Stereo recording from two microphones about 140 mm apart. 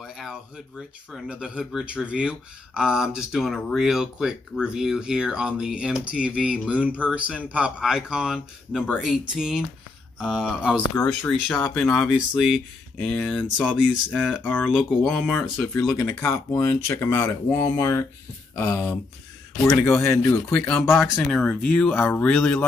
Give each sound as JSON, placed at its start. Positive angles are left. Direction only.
{"t": 0.0, "sound": "a sound", "side_deg": -5}
{"t": 1.1, "sound": "speech", "side_deg": -5}
{"t": 11.4, "sound": "speech", "side_deg": 10}
{"t": 13.4, "sound": "speech", "side_deg": -5}
{"t": 14.4, "sound": "speech", "side_deg": 10}
{"t": 16.1, "sound": "speech", "side_deg": 10}
{"t": 21.0, "sound": "speech", "side_deg": 5}